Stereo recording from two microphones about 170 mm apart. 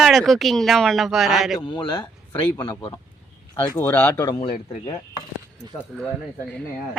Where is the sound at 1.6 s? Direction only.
25° left (ahead or behind); by 4.3 s 10° left (ahead or behind).